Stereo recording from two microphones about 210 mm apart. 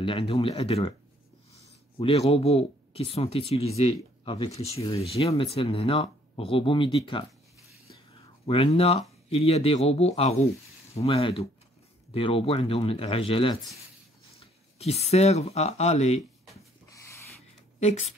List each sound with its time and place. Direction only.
0.0 s speech: 25° left (ahead or behind)
8.5 s speech: 25° left (ahead or behind)
17.7 s speech: 30° left (ahead or behind)